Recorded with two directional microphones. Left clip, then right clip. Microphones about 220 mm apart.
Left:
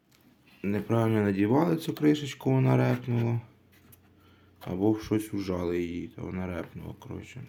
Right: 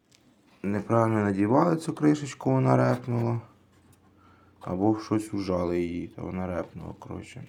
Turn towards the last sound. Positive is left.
turn(degrees=5)  # may be behind; listen again after turning